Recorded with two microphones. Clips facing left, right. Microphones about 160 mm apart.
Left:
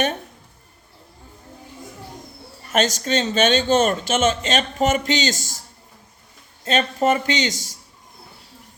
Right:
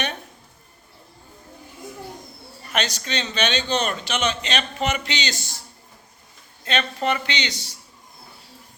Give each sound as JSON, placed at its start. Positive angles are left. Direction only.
{"t": 2.7, "sound": "speech", "side_deg": 45}
{"t": 6.7, "sound": "speech", "side_deg": 45}